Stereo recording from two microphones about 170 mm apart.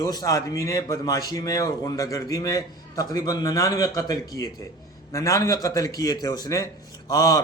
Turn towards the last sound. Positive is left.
turn(degrees=20)  # may be behind; listen again after turning